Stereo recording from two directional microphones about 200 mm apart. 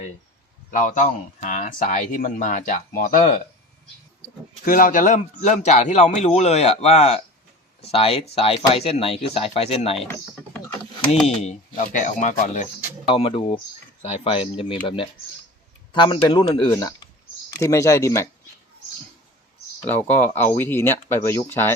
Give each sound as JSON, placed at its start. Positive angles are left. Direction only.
{"t": 0.7, "sound": "speech", "side_deg": 40}
{"t": 4.6, "sound": "speech", "side_deg": 45}
{"t": 11.4, "sound": "speech", "side_deg": 35}
{"t": 20.1, "sound": "speech", "side_deg": 10}